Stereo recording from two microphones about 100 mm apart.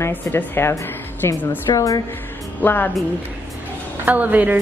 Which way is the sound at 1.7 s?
35° left (ahead or behind).